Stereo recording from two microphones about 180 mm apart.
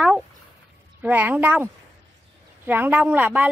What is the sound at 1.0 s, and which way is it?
Speech, 10° right (ahead or behind).